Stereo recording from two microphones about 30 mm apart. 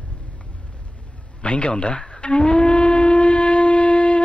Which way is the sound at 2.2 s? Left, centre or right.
Left.